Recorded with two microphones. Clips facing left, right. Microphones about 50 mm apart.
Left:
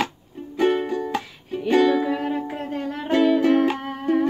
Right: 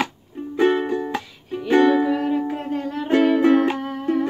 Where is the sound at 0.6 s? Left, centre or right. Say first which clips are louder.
Right 2 dB; centre.